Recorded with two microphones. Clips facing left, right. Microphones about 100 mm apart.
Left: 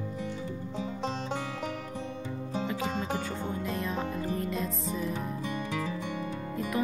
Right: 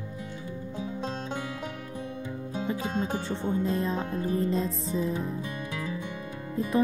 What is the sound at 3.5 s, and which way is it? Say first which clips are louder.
Music: right 8 dB; 30° right (ahead or behind).